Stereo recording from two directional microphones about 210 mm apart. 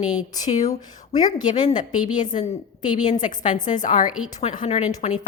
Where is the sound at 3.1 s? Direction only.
35° left (ahead or behind).